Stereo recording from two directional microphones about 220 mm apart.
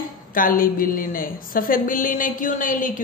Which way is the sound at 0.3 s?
40° left (ahead or behind).